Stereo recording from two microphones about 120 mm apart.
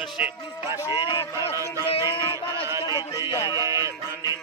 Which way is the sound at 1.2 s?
25° left (ahead or behind).